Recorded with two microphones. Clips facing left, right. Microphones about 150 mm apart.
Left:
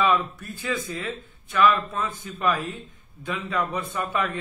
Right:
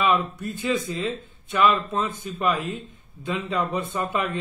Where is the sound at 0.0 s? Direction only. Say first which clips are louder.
Even; 20° right (ahead or behind).